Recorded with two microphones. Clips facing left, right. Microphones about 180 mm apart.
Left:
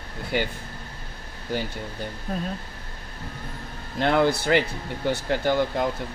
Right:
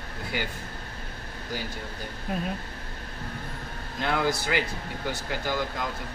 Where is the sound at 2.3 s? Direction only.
10° right (ahead or behind).